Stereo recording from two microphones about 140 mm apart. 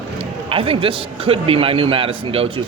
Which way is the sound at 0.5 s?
40° right (ahead or behind).